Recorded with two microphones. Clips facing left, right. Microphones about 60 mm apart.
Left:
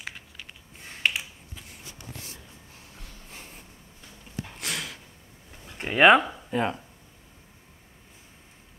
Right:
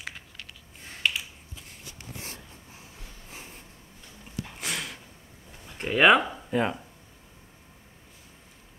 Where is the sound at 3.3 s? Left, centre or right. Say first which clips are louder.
Right 1 dB; centre.